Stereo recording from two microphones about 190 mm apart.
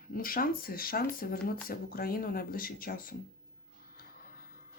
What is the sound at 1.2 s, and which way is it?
Speech, 50° left (ahead or behind).